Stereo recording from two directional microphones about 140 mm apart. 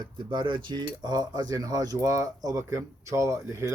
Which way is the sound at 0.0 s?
30° right (ahead or behind).